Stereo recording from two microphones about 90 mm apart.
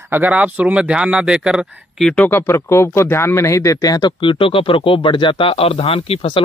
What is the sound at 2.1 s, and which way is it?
Speech, 20° left (ahead or behind).